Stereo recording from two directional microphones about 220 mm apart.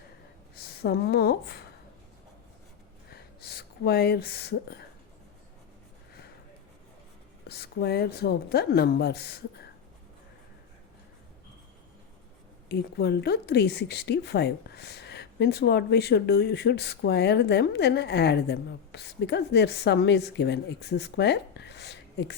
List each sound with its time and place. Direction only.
0.5 s a woman's voice: 45° left (ahead or behind)
3.1 s a sound: 45° left (ahead or behind)
7.4 s a woman's voice: 45° left (ahead or behind)
12.6 s a woman's voice: 45° left (ahead or behind)